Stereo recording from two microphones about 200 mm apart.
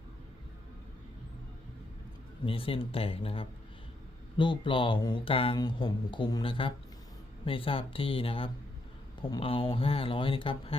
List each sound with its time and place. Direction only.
2.4 s speech: 25° left (ahead or behind)